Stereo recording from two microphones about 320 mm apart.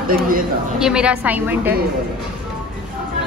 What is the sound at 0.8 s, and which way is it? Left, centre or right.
Speech, centre.